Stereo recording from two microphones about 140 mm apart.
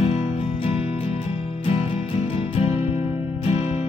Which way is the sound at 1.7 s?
45° left (ahead or behind).